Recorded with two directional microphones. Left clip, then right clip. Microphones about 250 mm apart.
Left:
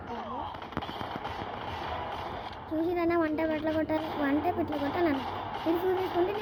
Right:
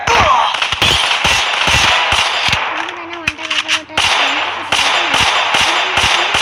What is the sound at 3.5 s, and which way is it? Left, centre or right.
Whip, right.